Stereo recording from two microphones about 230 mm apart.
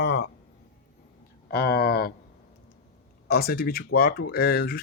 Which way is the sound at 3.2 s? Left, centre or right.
Left.